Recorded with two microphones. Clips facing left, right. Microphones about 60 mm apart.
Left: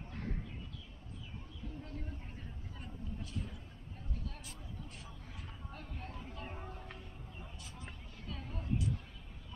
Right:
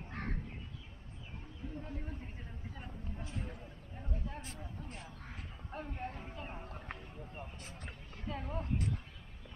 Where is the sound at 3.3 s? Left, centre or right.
Right.